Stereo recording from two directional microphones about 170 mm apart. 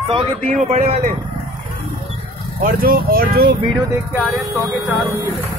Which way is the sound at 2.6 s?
60° right (ahead or behind).